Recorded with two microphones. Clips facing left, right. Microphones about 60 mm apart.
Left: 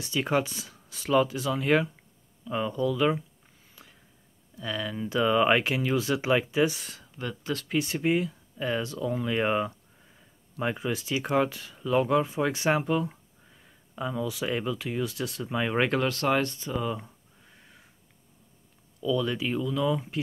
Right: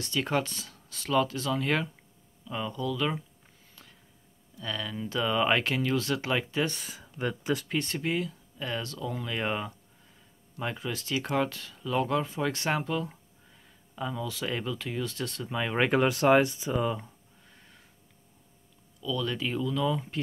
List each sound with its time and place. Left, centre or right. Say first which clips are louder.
0.0 s speech: left 2 dB; centre
3.7 s a sound: left 2 dB; centre
4.6 s speech: left 3 dB; centre
7.0 s speech: right 3 dB; centre
7.6 s speech: left 3 dB; centre
8.0 s speech: left 5 dB; centre
15.9 s speech: right 3 dB; centre
17.0 s a sound: left 1 dB; centre
19.0 s speech: left 4 dB; centre